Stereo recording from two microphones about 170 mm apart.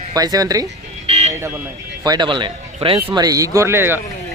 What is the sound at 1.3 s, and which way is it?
Speech, 15° right (ahead or behind).